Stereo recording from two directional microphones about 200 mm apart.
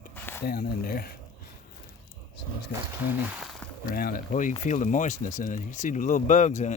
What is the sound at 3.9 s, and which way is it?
Speech, 45° left (ahead or behind).